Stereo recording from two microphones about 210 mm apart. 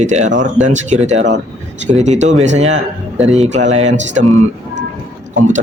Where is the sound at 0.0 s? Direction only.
35° right (ahead or behind).